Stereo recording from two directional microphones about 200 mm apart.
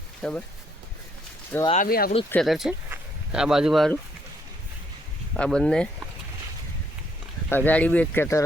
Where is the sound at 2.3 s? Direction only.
Centre (ahead or behind).